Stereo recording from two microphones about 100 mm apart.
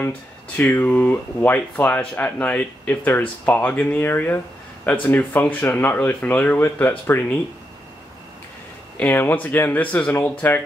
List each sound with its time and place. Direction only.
0.6 s speech: 15° left (ahead or behind)
8.9 s speech: 20° left (ahead or behind)